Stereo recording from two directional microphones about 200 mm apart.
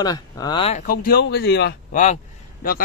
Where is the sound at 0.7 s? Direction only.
45° left (ahead or behind).